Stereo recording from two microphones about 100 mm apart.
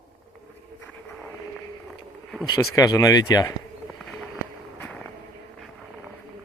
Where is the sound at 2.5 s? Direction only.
35° left (ahead or behind).